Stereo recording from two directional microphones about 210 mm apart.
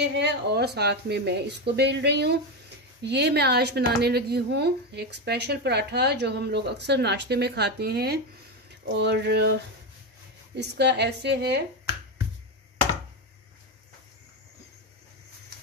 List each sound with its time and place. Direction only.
0.1 s speech: 55° right (ahead or behind)